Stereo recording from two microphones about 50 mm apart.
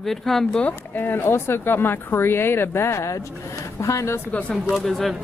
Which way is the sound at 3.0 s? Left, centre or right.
Left.